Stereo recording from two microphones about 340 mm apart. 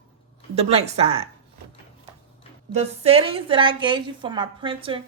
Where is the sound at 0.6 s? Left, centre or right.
Centre.